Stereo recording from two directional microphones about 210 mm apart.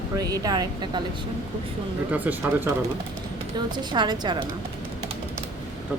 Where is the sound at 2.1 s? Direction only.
10° right (ahead or behind).